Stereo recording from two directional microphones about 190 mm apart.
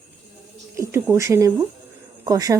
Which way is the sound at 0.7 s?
15° right (ahead or behind).